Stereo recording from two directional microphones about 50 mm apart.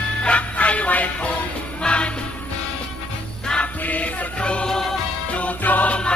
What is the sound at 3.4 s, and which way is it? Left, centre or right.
Music, centre.